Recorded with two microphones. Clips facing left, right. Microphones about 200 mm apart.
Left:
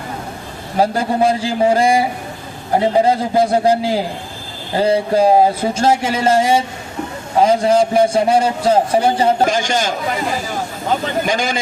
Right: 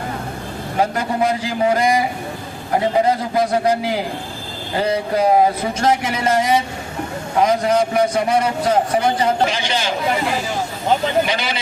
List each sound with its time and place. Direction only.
0.8 s a man's voice: 30° left (ahead or behind)
9.5 s a man's voice: 45° left (ahead or behind)
11.3 s a man's voice: 45° left (ahead or behind)